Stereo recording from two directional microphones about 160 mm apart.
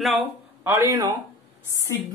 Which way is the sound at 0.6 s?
20° right (ahead or behind).